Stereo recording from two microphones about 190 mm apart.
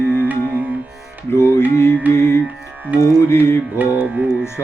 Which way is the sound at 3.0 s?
15° left (ahead or behind).